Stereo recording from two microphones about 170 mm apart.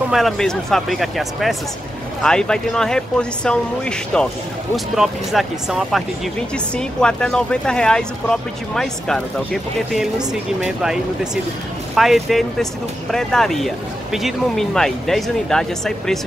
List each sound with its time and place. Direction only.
0.1 s speech: centre (ahead or behind)